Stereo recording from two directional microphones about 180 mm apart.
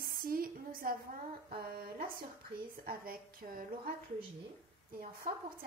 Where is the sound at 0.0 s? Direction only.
55° right (ahead or behind).